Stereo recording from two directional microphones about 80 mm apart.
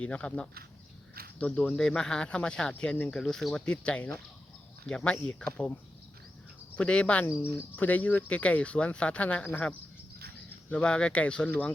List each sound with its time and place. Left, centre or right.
0.0 s speech: centre
6.7 s speech: centre
7.3 s speech: left